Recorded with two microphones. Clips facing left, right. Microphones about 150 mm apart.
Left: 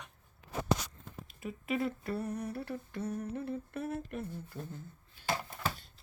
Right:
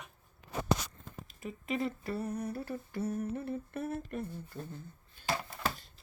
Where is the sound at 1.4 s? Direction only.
5° left (ahead or behind).